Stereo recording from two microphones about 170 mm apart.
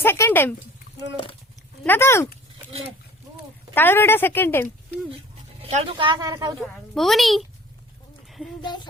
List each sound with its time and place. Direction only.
0.0 s a sound: 15° left (ahead or behind)
1.8 s speech: 10° left (ahead or behind)
3.8 s speech: 15° left (ahead or behind)
5.6 s speech: 35° right (ahead or behind)
6.6 s a woman's voice: centre (ahead or behind)
8.6 s music: 25° left (ahead or behind)